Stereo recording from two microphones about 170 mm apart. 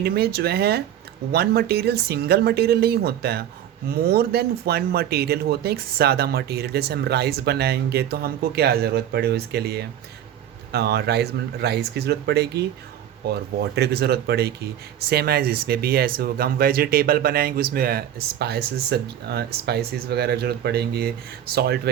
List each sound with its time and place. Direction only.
0.0 s speech: 65° right (ahead or behind)